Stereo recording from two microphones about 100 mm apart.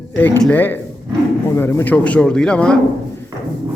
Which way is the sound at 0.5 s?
20° left (ahead or behind).